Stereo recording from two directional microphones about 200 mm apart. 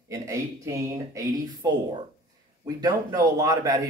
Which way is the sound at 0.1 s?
15° right (ahead or behind).